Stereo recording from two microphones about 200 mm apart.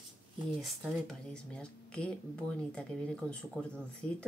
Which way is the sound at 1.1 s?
5° left (ahead or behind).